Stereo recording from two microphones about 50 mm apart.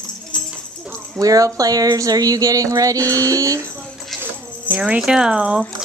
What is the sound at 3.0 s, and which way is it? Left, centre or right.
Speech, right.